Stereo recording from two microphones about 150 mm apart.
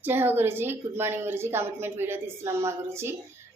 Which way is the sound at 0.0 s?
15° right (ahead or behind).